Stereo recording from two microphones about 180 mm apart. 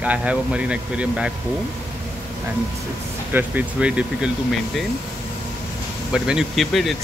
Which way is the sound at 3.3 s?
10° right (ahead or behind).